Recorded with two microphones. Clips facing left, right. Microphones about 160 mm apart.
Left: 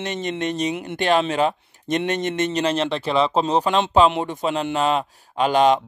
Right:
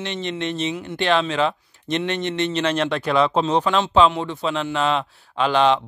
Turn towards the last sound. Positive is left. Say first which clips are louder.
# left 1 dB
turn(degrees=40)  # may be behind; listen again after turning